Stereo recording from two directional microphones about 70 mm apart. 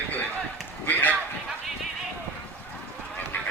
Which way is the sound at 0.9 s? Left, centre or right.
Left.